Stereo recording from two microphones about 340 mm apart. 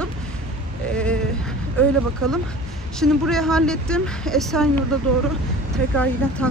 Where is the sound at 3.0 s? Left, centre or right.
Centre.